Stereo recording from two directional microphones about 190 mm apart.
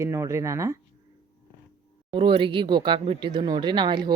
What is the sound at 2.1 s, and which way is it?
Speech, 25° right (ahead or behind).